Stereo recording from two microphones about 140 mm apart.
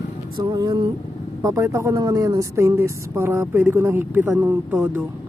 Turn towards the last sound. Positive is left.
turn(degrees=-15)  # may be behind; listen again after turning